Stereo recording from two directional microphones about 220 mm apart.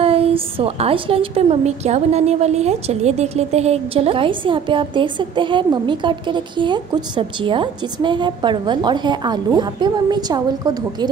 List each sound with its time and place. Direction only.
0.0 s a woman's voice: 25° right (ahead or behind)